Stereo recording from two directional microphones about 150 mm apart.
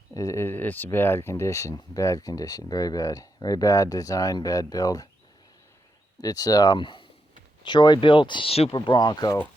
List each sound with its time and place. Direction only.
0.1 s speech: 20° left (ahead or behind)
6.2 s speech: 25° left (ahead or behind); by 8.7 s 40° left (ahead or behind)
8.7 s speech: 30° left (ahead or behind)